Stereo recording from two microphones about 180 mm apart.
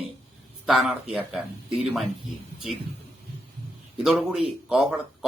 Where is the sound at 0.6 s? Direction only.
Centre (ahead or behind).